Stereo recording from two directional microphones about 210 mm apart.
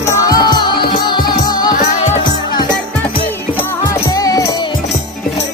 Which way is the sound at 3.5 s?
15° left (ahead or behind).